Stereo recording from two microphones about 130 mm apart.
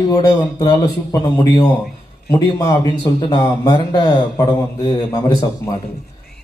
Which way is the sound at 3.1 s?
20° left (ahead or behind).